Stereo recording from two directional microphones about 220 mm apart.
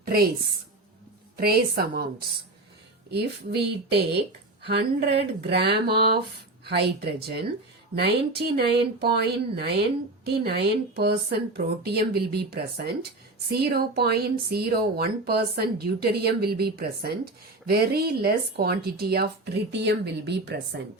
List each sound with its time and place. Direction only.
0.0 s a woman's voice: 45° right (ahead or behind)
1.4 s speech: 45° right (ahead or behind)
3.1 s speech: 45° right (ahead or behind)